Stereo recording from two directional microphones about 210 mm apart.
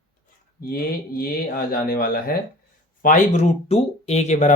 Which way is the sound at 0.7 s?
45° left (ahead or behind).